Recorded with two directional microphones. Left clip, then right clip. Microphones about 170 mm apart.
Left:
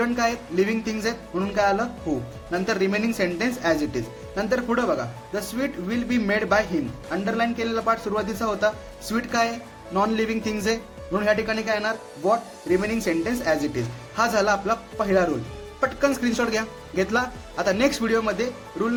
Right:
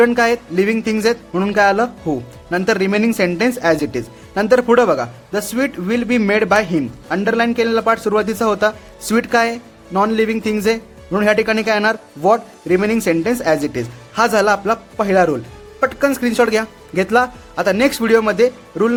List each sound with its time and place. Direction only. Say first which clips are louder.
0.0 s a man's voice: right 10 dB; 50° right (ahead or behind)